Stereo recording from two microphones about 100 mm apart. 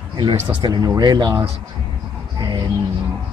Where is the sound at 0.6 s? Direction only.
45° right (ahead or behind).